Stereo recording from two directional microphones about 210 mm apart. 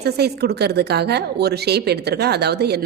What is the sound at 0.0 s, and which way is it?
A woman's voice, 50° right (ahead or behind).